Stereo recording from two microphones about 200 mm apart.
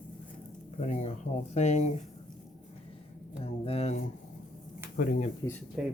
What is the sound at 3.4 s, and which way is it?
Speech, 30° left (ahead or behind).